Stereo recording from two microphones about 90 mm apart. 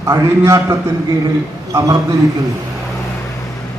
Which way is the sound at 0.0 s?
30° right (ahead or behind).